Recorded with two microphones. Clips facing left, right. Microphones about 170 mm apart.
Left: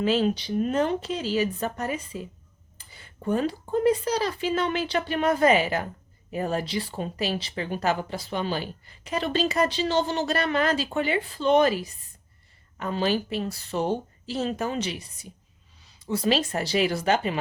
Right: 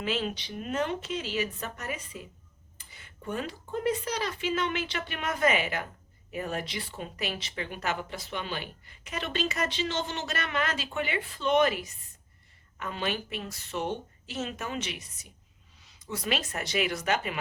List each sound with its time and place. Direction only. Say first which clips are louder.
0.0 s speech: left 8 dB; 35° left (ahead or behind)